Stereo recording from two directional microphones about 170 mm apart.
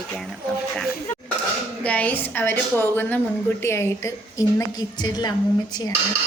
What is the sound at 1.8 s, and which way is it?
A woman's voice, 10° left (ahead or behind).